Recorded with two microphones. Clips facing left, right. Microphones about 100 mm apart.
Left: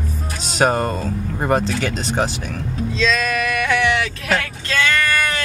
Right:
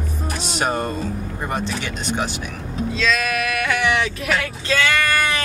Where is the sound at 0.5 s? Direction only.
40° left (ahead or behind).